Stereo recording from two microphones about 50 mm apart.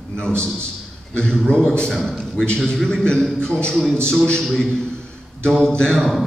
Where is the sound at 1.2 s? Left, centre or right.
Centre.